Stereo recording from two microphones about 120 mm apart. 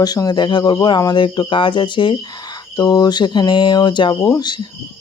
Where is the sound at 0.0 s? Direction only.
35° left (ahead or behind).